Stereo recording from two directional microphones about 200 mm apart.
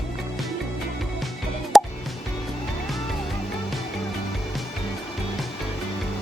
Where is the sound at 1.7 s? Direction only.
Centre (ahead or behind).